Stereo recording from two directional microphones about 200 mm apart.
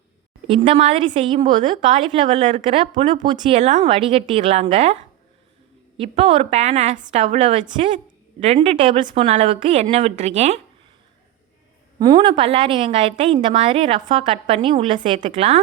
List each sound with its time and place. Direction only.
0.4 s a woman's voice: 25° right (ahead or behind)
6.0 s a woman's voice: 25° right (ahead or behind)
11.9 s a woman's voice: 20° right (ahead or behind)